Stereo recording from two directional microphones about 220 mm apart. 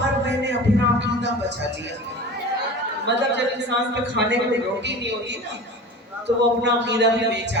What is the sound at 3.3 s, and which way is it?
Speech, 50° right (ahead or behind).